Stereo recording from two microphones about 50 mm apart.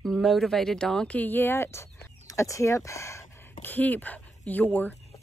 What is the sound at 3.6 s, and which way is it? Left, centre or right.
Speech, left.